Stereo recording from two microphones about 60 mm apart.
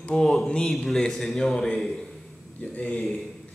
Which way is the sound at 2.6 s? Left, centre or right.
Left.